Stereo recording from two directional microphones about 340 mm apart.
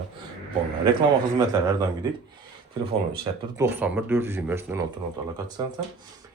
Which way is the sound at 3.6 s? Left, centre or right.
Centre.